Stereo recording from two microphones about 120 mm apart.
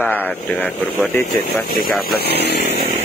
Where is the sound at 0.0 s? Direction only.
15° left (ahead or behind).